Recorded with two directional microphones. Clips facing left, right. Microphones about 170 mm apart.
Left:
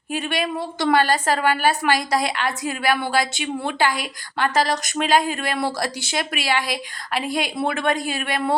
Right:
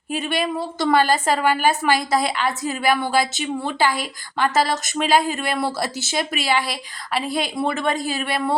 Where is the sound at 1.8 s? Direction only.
5° left (ahead or behind).